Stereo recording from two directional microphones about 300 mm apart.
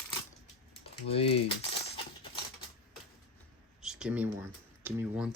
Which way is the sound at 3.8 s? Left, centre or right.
Centre.